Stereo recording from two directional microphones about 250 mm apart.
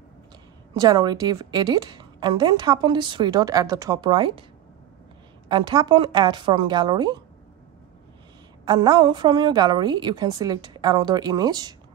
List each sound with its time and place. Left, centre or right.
0.7 s a woman's voice: centre
5.5 s a woman's voice: centre
8.6 s a woman's voice: centre